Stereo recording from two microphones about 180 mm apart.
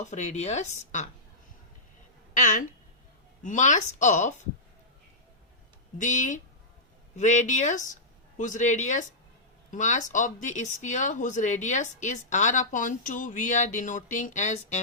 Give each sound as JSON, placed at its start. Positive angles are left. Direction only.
{"t": 0.0, "sound": "speech", "side_deg": 40}
{"t": 2.3, "sound": "speech", "side_deg": 45}
{"t": 6.0, "sound": "speech", "side_deg": 45}